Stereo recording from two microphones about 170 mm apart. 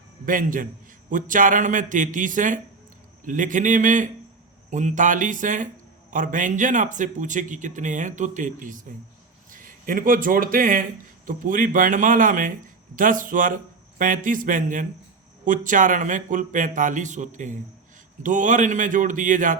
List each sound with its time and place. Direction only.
0.3 s a man's voice: 50° right (ahead or behind)